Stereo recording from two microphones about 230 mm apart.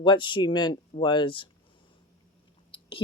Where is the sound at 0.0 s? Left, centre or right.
Centre.